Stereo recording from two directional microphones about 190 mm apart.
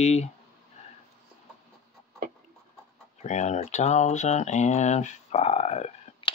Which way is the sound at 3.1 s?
35° left (ahead or behind).